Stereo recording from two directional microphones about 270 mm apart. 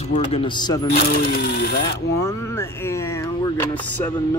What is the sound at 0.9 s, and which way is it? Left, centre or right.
Speech, left.